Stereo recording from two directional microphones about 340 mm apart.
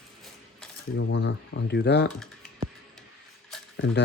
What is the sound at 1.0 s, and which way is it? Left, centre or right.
Speech, left.